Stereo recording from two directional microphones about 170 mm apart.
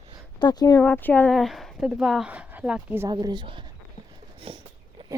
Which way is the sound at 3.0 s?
25° right (ahead or behind).